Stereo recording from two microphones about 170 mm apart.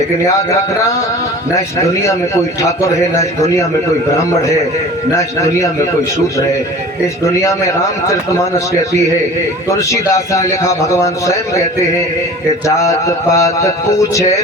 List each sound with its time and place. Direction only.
1.5 s a man's voice: 20° left (ahead or behind)
5.1 s a man's voice: 20° left (ahead or behind)
9.6 s a man's voice: 20° left (ahead or behind)
12.6 s a man's voice: 20° left (ahead or behind)